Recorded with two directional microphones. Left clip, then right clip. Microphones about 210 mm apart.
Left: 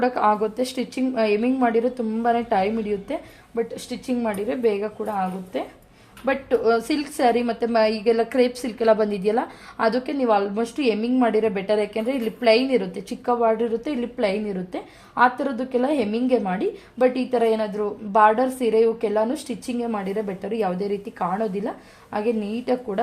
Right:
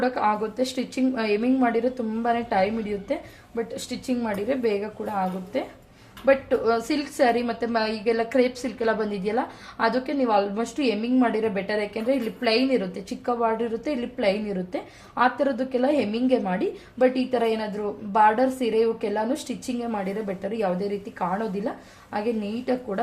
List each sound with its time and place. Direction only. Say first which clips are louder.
0.0 s a woman's voice: left 3 dB; 35° left (ahead or behind)
3.1 s a woman's voice: right 1 dB; 25° left (ahead or behind)
6.2 s a woman's voice: even; 30° left (ahead or behind)